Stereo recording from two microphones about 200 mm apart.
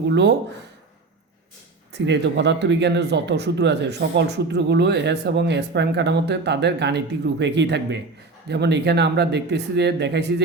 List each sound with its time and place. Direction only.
0.1 s speech: 60° right (ahead or behind)
1.9 s speech: 60° right (ahead or behind)